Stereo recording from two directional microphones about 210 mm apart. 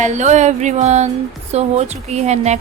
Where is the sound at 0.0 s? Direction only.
35° right (ahead or behind).